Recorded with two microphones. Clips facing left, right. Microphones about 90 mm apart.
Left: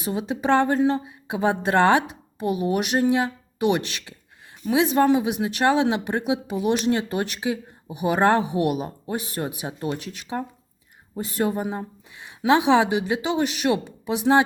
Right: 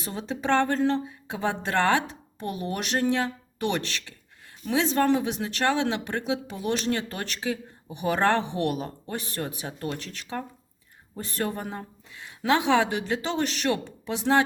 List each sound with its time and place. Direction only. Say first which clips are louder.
0.0 s speech: left 5 dB; 15° left (ahead or behind)